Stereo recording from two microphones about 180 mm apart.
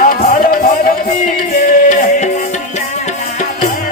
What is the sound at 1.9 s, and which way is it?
Music, 40° left (ahead or behind).